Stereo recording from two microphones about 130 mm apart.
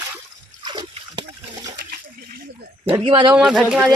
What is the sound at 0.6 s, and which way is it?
Trickle, 35° right (ahead or behind).